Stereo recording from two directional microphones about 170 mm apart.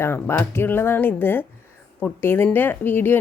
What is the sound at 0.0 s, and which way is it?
A woman's voice, 15° left (ahead or behind).